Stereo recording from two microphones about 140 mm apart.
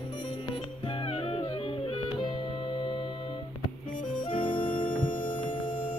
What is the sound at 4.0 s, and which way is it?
Music, 70° left (ahead or behind).